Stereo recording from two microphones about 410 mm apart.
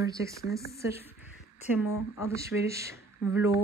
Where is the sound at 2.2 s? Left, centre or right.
Centre.